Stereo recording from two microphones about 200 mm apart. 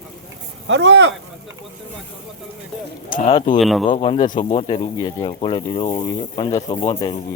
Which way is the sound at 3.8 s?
30° left (ahead or behind).